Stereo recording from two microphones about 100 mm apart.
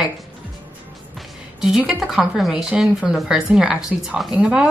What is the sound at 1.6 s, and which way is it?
A woman's voice, 5° right (ahead or behind).